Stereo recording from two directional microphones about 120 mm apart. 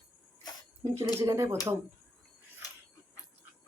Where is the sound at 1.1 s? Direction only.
25° right (ahead or behind).